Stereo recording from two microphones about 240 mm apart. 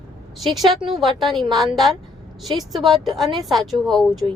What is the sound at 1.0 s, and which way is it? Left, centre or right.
Speech, centre.